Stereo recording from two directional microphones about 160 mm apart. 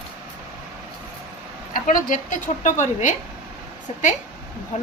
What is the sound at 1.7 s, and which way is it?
A woman's voice, 55° left (ahead or behind).